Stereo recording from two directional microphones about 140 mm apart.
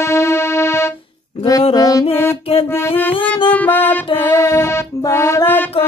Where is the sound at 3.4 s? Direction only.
10° left (ahead or behind).